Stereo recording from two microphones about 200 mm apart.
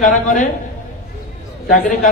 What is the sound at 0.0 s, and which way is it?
Speech, 40° left (ahead or behind).